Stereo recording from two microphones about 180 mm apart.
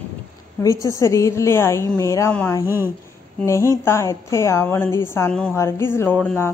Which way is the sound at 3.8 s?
15° left (ahead or behind).